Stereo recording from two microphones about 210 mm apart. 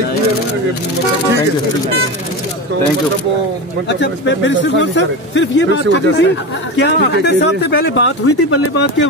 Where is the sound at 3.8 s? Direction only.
60° left (ahead or behind).